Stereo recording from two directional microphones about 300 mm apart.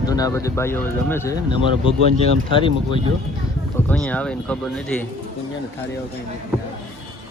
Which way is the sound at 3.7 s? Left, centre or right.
Centre.